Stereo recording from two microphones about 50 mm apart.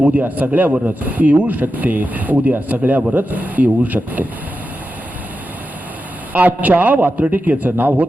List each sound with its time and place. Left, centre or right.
0.0 s speech: right
6.3 s speech: right